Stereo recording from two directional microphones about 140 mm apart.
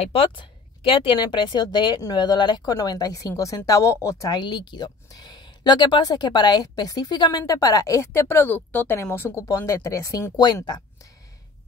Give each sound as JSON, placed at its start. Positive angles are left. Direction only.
{"t": 0.0, "sound": "speech", "side_deg": 45}